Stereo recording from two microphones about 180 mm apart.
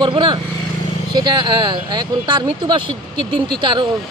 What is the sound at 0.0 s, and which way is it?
Speech, 25° right (ahead or behind).